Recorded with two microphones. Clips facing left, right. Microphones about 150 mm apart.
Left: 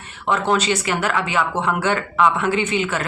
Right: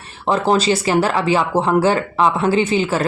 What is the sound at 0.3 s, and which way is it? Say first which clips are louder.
Speech: right 3 dB; 30° right (ahead or behind).